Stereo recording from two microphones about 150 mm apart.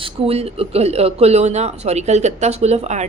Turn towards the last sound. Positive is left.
turn(degrees=-45)  # may be behind; listen again after turning